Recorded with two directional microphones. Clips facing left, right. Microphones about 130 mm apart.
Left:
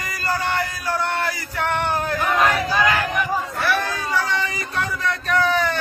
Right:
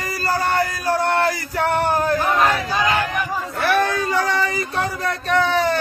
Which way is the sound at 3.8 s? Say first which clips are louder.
Right 4 dB; 45° right (ahead or behind).